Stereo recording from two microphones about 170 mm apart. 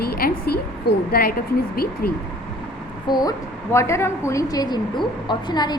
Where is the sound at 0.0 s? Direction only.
65° left (ahead or behind).